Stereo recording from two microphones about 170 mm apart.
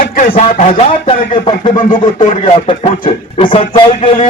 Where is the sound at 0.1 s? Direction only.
55° left (ahead or behind).